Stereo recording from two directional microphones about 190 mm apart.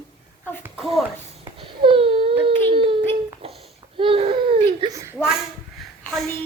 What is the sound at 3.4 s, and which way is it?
Babbling, 30° right (ahead or behind).